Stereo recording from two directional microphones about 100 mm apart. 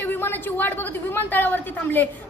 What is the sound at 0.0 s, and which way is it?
A woman's voice, 20° left (ahead or behind).